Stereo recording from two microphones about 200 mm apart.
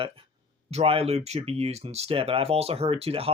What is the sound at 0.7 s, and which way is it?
Speech, 30° right (ahead or behind).